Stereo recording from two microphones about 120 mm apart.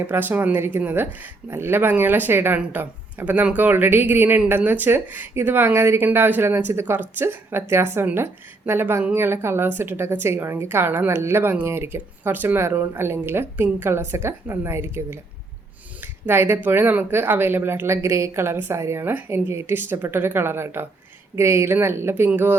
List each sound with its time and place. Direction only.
0.1 s a woman's voice: 15° right (ahead or behind)